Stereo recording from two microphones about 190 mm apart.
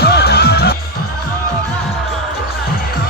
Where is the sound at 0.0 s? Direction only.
55° left (ahead or behind).